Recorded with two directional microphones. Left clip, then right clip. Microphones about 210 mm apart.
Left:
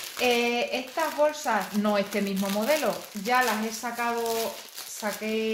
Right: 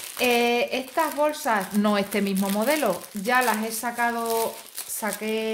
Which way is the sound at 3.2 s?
50° right (ahead or behind).